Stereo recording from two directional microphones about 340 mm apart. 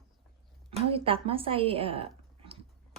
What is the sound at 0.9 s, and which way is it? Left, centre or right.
Speech, centre.